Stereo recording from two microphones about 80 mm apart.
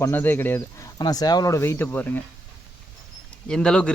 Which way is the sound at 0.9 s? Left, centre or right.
Left.